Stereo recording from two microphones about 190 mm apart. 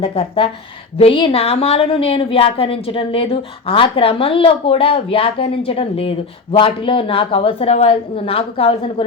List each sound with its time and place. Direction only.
0.0 s speech: 30° left (ahead or behind)